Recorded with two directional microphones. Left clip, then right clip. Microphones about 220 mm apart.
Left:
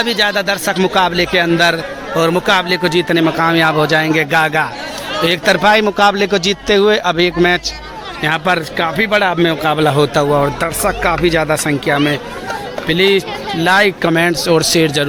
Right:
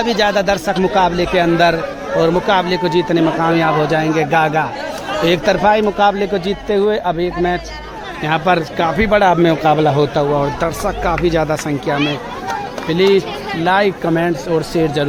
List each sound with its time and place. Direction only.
0.0 s a man's voice: 5° right (ahead or behind); by 15.0 s 10° left (ahead or behind)